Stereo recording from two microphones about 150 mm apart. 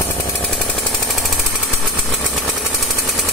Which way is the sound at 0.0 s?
10° left (ahead or behind).